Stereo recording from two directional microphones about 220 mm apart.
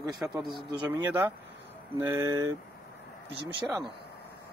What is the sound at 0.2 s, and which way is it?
Speech, 10° right (ahead or behind).